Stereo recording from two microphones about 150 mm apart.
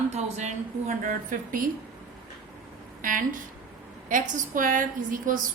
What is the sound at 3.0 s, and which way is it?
A woman's voice, 65° right (ahead or behind).